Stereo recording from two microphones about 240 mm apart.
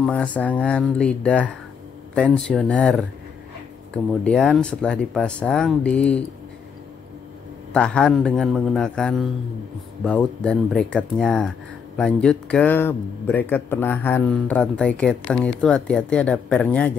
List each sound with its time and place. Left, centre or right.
0.0 s speech: centre
7.7 s speech: centre